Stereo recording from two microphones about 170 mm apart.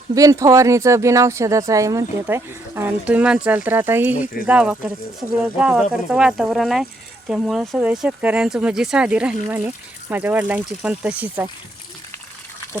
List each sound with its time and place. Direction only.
0.1 s speech: 20° right (ahead or behind)